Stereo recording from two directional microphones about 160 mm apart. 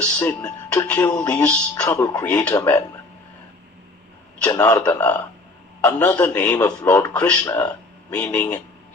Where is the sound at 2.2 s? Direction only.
5° left (ahead or behind).